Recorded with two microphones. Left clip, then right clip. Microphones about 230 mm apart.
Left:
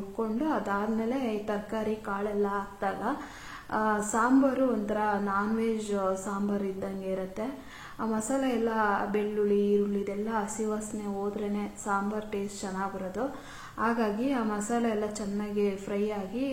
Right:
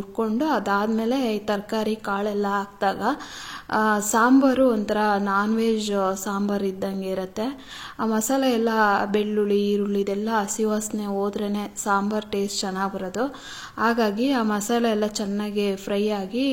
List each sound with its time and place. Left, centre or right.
0.2 s a woman's voice: right